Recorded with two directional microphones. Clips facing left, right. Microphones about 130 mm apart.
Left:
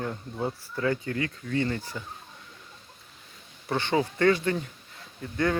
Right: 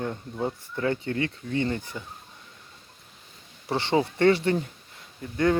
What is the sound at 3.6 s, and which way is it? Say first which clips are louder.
Speech: right 2 dB; 25° right (ahead or behind).